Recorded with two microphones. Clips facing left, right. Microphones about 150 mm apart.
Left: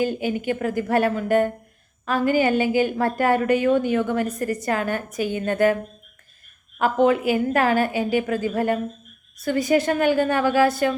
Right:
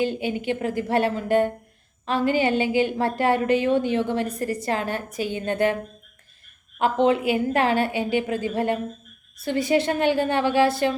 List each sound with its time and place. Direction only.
0.0 s a woman's voice: 25° right (ahead or behind)
7.0 s a woman's voice: 25° right (ahead or behind)